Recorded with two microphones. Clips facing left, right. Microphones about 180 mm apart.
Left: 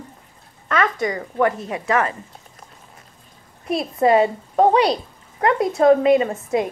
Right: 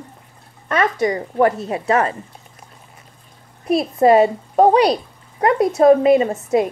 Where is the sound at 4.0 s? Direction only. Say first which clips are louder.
Right 3 dB; 25° right (ahead or behind).